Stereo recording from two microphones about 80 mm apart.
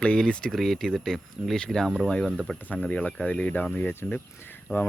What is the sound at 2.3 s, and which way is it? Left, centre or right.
Speech, centre.